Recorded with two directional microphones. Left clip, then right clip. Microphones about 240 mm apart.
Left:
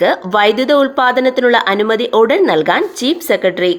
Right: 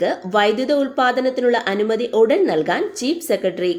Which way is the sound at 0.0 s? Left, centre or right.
Centre.